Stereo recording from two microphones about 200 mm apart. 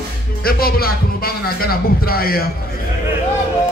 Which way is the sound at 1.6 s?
50° left (ahead or behind).